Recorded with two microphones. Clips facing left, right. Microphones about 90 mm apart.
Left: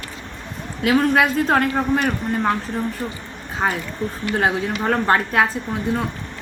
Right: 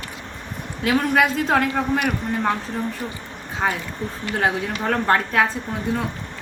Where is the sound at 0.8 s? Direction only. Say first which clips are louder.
Left 2 dB; 5° left (ahead or behind).